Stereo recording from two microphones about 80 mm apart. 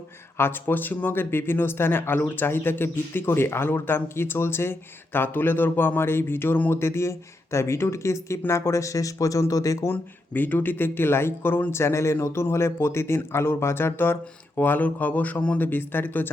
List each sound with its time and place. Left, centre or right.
0.3 s speech: left
9.8 s speech: left